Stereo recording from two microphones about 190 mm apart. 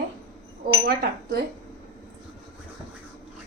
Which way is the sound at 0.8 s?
55° right (ahead or behind).